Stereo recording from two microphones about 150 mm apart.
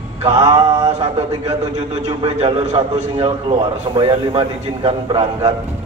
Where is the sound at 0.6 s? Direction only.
25° right (ahead or behind).